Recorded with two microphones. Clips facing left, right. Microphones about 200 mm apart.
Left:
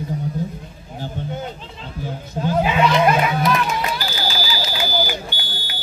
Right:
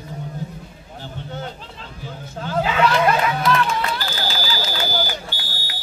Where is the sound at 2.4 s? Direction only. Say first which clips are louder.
Left 2 dB; 20° left (ahead or behind).